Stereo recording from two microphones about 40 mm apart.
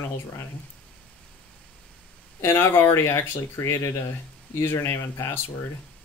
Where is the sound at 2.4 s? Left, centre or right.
Left.